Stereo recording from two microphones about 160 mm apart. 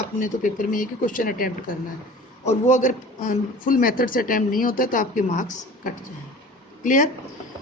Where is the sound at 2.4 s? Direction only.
45° left (ahead or behind).